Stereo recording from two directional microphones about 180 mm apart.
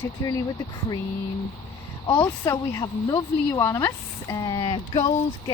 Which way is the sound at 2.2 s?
15° left (ahead or behind).